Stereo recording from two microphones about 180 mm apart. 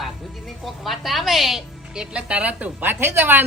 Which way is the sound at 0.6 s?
Centre (ahead or behind).